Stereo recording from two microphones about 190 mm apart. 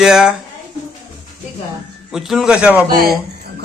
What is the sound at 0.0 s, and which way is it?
Speech, 5° right (ahead or behind).